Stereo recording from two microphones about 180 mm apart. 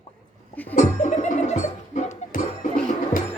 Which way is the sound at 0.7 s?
40° left (ahead or behind).